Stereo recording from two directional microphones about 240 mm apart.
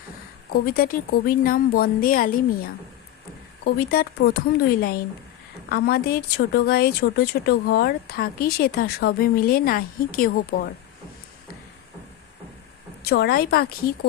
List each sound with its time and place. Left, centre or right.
0.5 s speech: left
13.1 s speech: left